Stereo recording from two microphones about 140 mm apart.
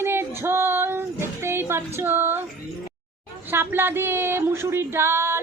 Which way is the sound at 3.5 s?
15° right (ahead or behind).